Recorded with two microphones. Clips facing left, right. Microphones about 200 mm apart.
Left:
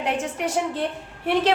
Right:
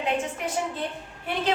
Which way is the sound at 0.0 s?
80° left.